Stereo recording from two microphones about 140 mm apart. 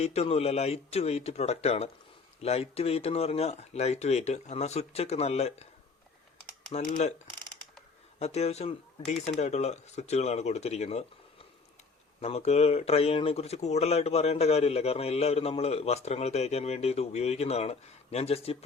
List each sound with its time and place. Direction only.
0.0 s speech: 50° left (ahead or behind)
6.7 s speech: 50° left (ahead or behind)
8.2 s speech: 50° left (ahead or behind)
12.2 s speech: 50° left (ahead or behind)